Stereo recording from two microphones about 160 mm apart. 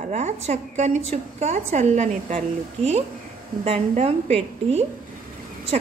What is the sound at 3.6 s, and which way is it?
A woman's voice, 40° right (ahead or behind).